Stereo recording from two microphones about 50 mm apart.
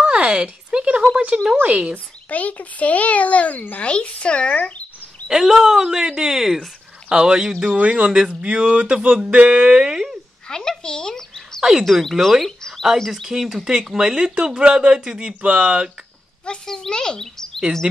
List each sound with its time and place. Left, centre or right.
0.0 s speech: right
2.2 s speech: left
5.3 s speech: centre
7.2 s speech: centre
9.8 s speech: centre
10.5 s speech: centre
11.8 s speech: centre
13.7 s speech: centre
16.6 s speech: centre